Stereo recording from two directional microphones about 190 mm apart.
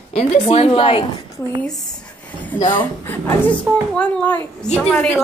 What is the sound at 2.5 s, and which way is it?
Speech, 25° left (ahead or behind).